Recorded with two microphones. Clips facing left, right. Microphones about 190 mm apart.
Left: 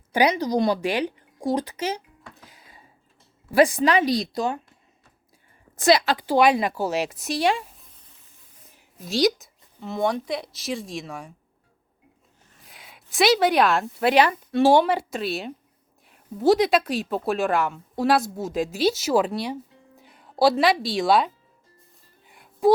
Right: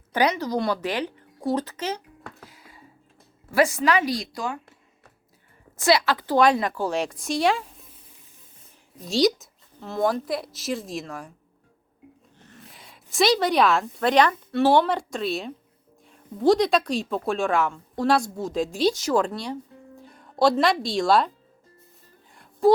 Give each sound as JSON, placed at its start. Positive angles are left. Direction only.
{"t": 0.1, "sound": "a woman's voice", "side_deg": 10}
{"t": 2.5, "sound": "a sound", "side_deg": 20}
{"t": 3.6, "sound": "speech", "side_deg": 30}
{"t": 5.7, "sound": "a woman's voice", "side_deg": 20}
{"t": 9.0, "sound": "speech", "side_deg": 0}
{"t": 12.6, "sound": "a woman's voice", "side_deg": 0}
{"t": 22.3, "sound": "a sound", "side_deg": 5}